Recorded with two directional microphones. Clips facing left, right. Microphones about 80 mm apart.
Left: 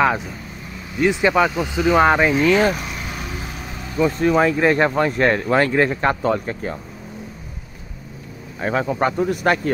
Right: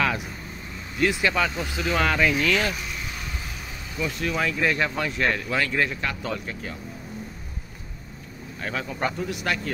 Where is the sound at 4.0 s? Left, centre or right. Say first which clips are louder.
Left 10 dB; left.